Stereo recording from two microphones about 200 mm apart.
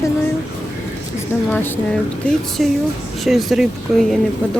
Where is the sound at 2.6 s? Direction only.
Centre (ahead or behind).